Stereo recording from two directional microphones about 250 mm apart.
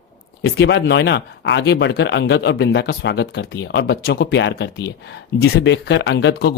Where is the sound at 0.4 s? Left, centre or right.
Left.